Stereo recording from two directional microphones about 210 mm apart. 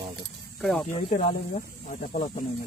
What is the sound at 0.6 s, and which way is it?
Speech, centre (ahead or behind).